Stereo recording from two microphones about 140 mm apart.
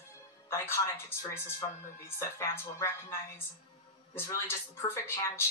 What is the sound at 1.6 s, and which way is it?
Speech, 20° left (ahead or behind).